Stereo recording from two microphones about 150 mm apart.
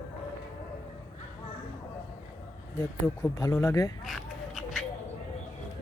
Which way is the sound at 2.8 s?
20° left (ahead or behind).